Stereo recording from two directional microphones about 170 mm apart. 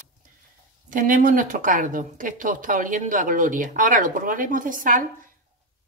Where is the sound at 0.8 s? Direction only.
55° right (ahead or behind).